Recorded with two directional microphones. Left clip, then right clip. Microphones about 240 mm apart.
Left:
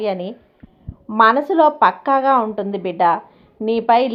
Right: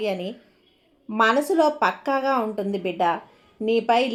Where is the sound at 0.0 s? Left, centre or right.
Centre.